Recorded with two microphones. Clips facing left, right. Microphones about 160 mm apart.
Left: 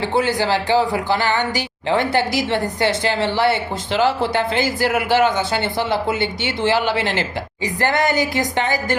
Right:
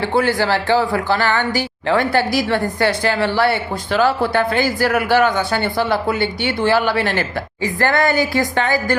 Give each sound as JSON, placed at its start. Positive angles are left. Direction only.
{"t": 0.0, "sound": "a woman's voice", "side_deg": 20}